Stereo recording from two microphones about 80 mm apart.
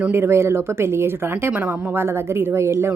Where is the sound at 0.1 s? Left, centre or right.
Right.